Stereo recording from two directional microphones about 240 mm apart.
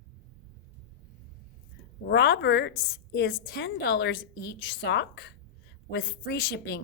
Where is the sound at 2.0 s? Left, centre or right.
Left.